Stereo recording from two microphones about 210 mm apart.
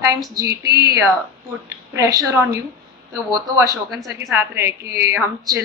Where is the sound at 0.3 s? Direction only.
15° right (ahead or behind).